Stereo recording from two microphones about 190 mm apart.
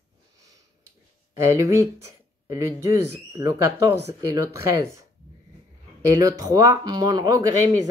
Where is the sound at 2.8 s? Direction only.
15° right (ahead or behind).